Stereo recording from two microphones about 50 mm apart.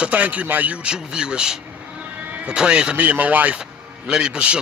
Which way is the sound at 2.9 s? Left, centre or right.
Right.